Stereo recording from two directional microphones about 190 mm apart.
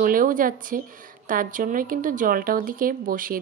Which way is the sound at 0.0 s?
45° right (ahead or behind).